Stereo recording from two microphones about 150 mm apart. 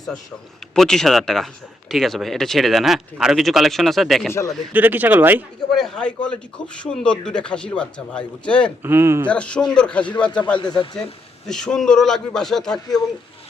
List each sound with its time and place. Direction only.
0.8 s speech: 5° left (ahead or behind)
4.7 s speech: 10° right (ahead or behind)
5.7 s speech: 5° left (ahead or behind)
8.8 s speech: 15° right (ahead or behind)
9.3 s speech: 5° left (ahead or behind)
10.6 s speech: 30° left (ahead or behind)
11.4 s speech: 5° left (ahead or behind)